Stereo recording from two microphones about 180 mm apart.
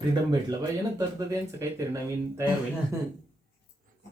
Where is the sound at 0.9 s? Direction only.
15° right (ahead or behind).